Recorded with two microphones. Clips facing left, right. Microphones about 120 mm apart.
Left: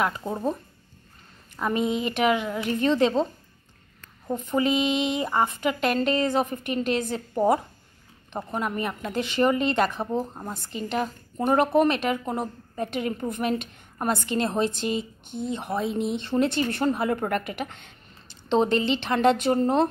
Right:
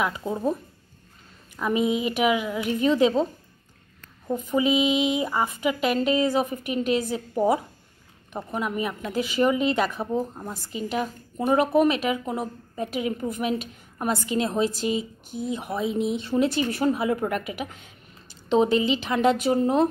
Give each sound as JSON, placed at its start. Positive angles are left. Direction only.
{"t": 0.0, "sound": "speech", "side_deg": 0}
{"t": 1.6, "sound": "speech", "side_deg": -5}
{"t": 4.5, "sound": "speech", "side_deg": -5}
{"t": 10.3, "sound": "speech", "side_deg": 15}
{"t": 10.6, "sound": "speech", "side_deg": -5}